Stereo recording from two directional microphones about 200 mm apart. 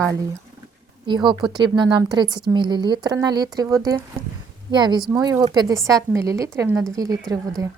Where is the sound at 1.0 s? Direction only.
25° right (ahead or behind).